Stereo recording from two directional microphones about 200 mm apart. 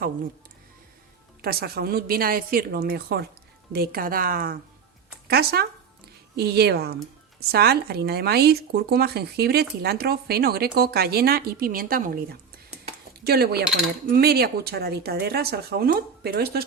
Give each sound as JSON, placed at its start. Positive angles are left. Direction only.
{"t": 1.4, "sound": "speech", "side_deg": -50}